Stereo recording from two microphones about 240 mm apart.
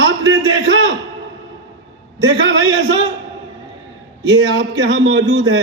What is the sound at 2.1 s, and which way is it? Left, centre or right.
Speech, right.